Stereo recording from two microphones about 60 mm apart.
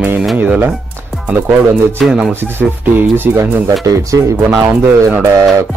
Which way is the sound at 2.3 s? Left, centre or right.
Right.